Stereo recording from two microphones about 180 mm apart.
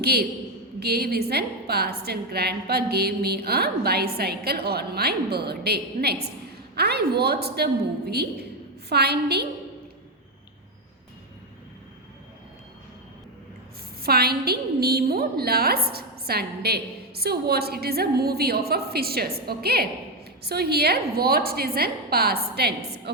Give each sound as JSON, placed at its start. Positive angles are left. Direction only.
{"t": 0.0, "sound": "a woman's voice", "side_deg": -60}
{"t": 14.0, "sound": "a woman's voice", "side_deg": -60}